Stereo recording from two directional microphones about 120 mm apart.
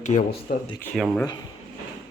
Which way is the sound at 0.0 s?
90° left.